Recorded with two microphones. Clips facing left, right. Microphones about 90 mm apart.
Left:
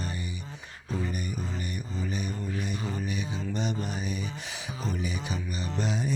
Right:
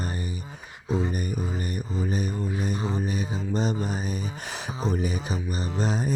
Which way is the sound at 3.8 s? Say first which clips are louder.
Right 3 dB; 40° right (ahead or behind).